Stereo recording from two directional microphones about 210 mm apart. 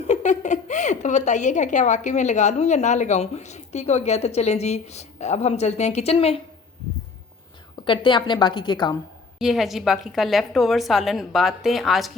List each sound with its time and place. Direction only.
0.1 s a woman's voice: 35° left (ahead or behind)
7.9 s a woman's voice: 20° left (ahead or behind)
9.4 s a woman's voice: centre (ahead or behind)